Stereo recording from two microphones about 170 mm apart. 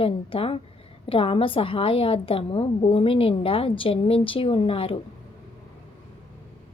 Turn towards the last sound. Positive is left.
turn(degrees=35)  # may be behind; listen again after turning